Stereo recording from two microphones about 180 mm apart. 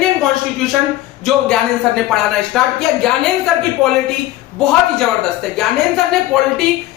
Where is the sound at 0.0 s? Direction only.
Centre (ahead or behind).